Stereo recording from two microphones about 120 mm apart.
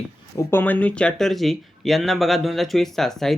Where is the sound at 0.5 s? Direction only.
15° left (ahead or behind).